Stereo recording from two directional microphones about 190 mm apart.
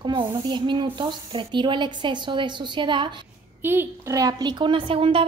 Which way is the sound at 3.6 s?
15° right (ahead or behind).